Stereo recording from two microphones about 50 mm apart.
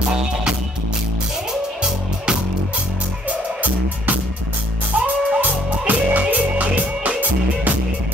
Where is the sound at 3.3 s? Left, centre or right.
Right.